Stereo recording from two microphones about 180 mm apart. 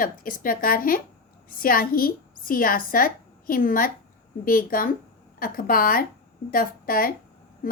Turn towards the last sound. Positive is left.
turn(degrees=55)  # may be behind; listen again after turning